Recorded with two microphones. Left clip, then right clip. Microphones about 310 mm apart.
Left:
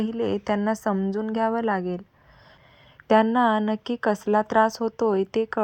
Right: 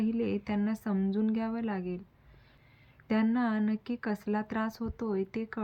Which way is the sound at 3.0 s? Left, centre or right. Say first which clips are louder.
Left 12 dB; left.